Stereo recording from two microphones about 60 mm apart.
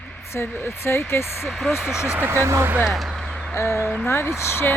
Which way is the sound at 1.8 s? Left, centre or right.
Centre.